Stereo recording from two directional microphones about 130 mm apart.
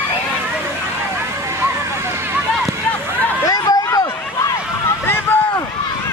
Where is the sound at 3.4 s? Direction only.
30° left (ahead or behind).